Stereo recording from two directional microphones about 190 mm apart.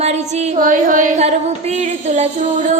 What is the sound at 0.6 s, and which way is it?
Carnatic music, 45° right (ahead or behind).